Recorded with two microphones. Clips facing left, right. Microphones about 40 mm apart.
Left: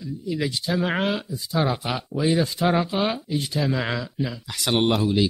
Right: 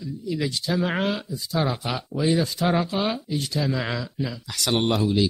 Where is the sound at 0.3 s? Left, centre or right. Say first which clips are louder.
Left 1 dB; centre.